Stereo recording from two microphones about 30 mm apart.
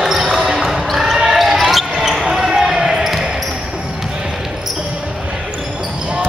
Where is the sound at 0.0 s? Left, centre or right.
Centre.